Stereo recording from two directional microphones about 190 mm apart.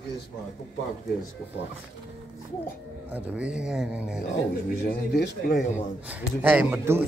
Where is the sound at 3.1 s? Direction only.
5° right (ahead or behind).